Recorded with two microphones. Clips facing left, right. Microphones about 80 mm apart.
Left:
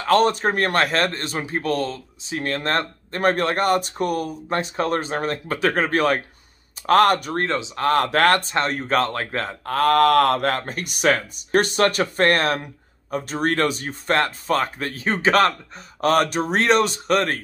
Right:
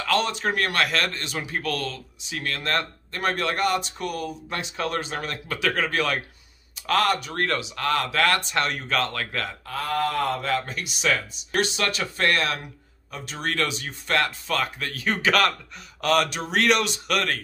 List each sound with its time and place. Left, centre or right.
0.0 s a man's voice: left
6.9 s speech: left
7.3 s a man's voice: left
9.7 s mantra: left
10.6 s a man's voice: left